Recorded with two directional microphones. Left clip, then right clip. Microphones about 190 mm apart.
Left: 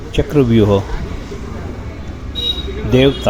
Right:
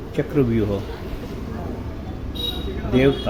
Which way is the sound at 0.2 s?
20° left (ahead or behind).